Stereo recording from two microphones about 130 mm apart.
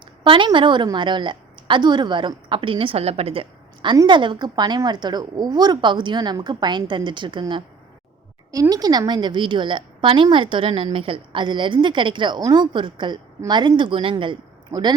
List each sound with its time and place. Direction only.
0.3 s a woman's voice: 40° right (ahead or behind)
3.9 s a woman's voice: 35° right (ahead or behind)
8.7 s a woman's voice: 30° right (ahead or behind)